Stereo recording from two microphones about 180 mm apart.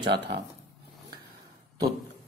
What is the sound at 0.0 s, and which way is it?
Speech, 70° right (ahead or behind).